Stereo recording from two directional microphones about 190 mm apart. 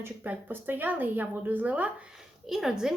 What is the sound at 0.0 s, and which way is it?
Speech, 10° right (ahead or behind).